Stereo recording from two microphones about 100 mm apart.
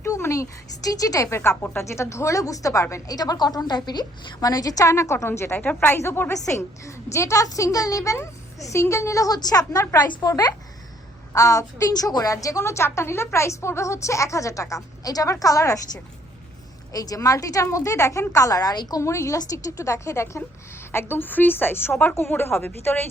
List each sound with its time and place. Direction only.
0.0 s a sound: 30° left (ahead or behind)
0.9 s a woman's voice: 35° left (ahead or behind)
16.9 s a woman's voice: 40° left (ahead or behind); by 23.0 s 20° left (ahead or behind)